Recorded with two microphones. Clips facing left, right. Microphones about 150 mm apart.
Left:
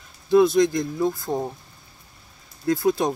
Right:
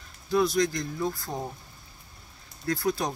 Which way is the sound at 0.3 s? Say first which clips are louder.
Left 8 dB; 20° left (ahead or behind).